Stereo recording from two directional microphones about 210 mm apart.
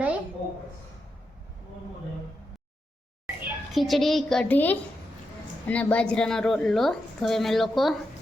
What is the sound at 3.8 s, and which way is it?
A woman's voice, centre (ahead or behind).